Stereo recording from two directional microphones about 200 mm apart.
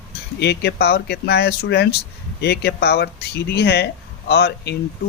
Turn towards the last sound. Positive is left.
turn(degrees=55)  # may be behind; listen again after turning